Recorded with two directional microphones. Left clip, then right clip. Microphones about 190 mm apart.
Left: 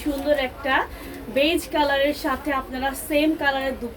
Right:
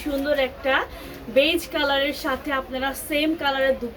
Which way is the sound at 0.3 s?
15° right (ahead or behind).